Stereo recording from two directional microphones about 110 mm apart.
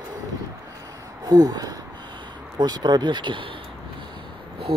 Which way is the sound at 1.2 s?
35° right (ahead or behind).